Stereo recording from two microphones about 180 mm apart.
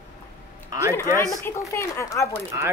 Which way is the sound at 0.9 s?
15° left (ahead or behind).